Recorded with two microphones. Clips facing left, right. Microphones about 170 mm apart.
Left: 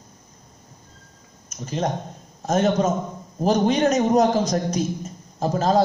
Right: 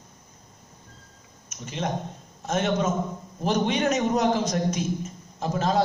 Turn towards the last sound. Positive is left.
turn(degrees=40)  # may be behind; listen again after turning